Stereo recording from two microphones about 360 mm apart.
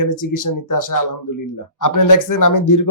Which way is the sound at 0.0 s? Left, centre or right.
Left.